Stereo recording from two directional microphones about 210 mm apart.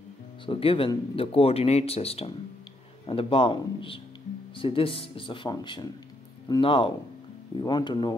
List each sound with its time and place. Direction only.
0.5 s speech: 25° left (ahead or behind)